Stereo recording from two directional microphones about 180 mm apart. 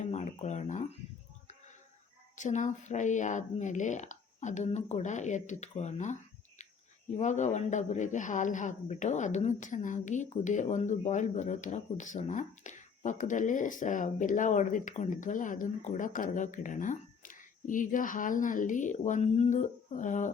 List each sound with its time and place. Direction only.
0.0 s a sound: 40° left (ahead or behind)
2.3 s speech: 45° left (ahead or behind)
7.2 s speech: 40° left (ahead or behind)